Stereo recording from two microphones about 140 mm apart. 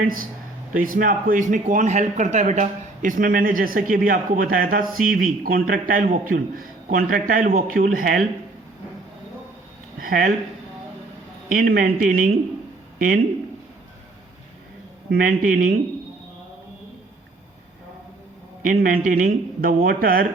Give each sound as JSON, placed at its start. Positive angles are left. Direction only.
{"t": 0.0, "sound": "speech", "side_deg": -90}
{"t": 0.7, "sound": "speech", "side_deg": -75}
{"t": 10.0, "sound": "speech", "side_deg": -80}
{"t": 11.4, "sound": "speech", "side_deg": -85}
{"t": 15.1, "sound": "speech", "side_deg": -80}
{"t": 18.7, "sound": "speech", "side_deg": -85}
{"t": 19.0, "sound": "speech", "side_deg": -75}